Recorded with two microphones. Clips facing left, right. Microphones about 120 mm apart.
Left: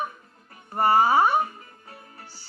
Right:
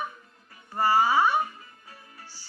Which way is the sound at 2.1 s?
55° left (ahead or behind).